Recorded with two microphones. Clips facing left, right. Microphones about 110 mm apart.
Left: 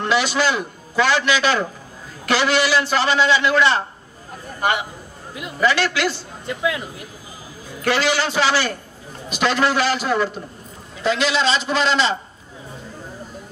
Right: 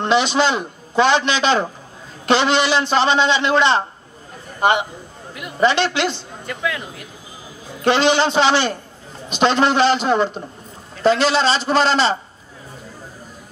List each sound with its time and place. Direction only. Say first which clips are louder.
0.0 s a man's voice: right 3 dB; 25° right (ahead or behind)
6.4 s speech: left 2 dB; 20° left (ahead or behind)
7.8 s a man's voice: right 4 dB; 25° right (ahead or behind)
11.0 s a man's voice: right 4 dB; 35° right (ahead or behind)